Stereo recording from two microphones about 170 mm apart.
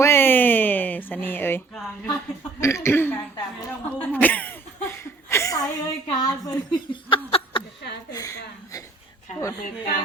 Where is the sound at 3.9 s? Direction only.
10° left (ahead or behind).